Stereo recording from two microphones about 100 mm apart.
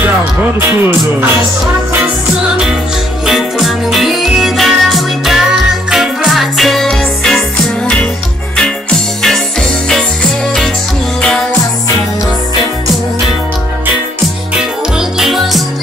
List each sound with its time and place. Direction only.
0.6 s speech: 20° right (ahead or behind)
3.3 s music: centre (ahead or behind)
9.2 s music: 5° left (ahead or behind)
11.1 s music: 10° left (ahead or behind)
14.5 s music: 5° right (ahead or behind)